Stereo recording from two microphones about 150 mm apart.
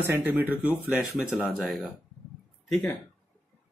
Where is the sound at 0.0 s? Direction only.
10° right (ahead or behind).